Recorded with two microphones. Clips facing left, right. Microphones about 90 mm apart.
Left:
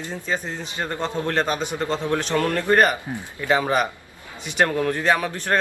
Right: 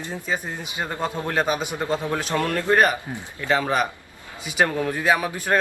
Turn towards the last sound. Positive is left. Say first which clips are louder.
# even
turn(degrees=-10)  # may be behind; listen again after turning